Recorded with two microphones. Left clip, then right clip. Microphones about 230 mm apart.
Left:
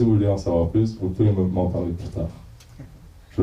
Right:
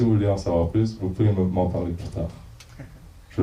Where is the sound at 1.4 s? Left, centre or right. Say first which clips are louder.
Even; right.